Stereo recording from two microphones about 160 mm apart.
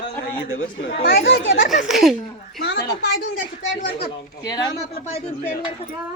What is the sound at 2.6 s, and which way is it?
Speech, 90° left.